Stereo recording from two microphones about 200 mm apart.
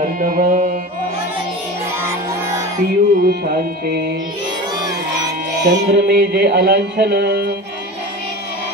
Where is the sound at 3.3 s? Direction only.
50° right (ahead or behind).